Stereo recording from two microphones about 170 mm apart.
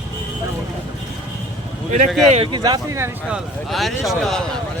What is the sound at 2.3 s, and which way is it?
Speech, 30° right (ahead or behind).